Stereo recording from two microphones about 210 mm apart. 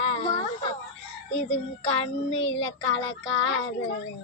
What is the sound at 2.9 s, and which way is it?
Child singing, 25° left (ahead or behind).